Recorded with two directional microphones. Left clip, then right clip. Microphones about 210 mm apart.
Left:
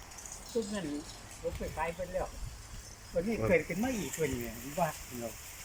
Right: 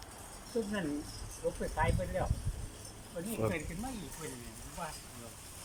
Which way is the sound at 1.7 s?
Centre (ahead or behind).